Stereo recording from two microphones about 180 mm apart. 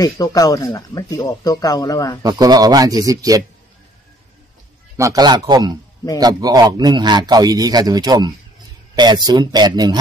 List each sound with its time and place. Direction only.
0.0 s speech: 20° left (ahead or behind)
2.2 s a man's voice: 20° right (ahead or behind)
4.9 s a man's voice: 20° right (ahead or behind)